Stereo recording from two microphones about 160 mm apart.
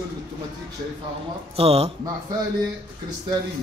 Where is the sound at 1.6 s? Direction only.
35° right (ahead or behind).